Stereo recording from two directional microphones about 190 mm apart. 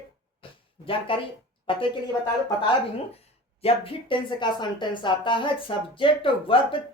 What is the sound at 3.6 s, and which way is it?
Speech, 30° left (ahead or behind).